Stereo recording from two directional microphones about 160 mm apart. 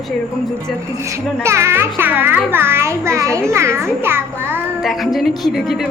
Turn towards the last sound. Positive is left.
turn(degrees=0)  # may be behind; listen again after turning